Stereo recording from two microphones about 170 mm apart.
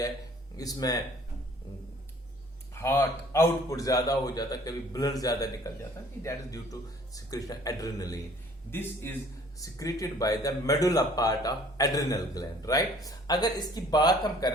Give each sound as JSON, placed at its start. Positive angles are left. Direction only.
{"t": 0.5, "sound": "a man's voice", "side_deg": 20}
{"t": 2.7, "sound": "a man's voice", "side_deg": 15}